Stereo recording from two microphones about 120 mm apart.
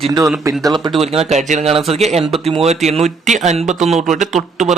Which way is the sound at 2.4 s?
55° right (ahead or behind).